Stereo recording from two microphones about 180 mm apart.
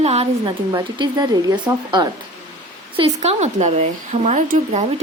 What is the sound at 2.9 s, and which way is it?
Speech, 35° right (ahead or behind).